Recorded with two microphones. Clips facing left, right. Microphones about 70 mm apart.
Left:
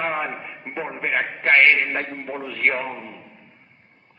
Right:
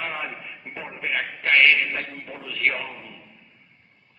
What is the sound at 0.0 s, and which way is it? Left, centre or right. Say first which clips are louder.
Speech: left 6 dB; left.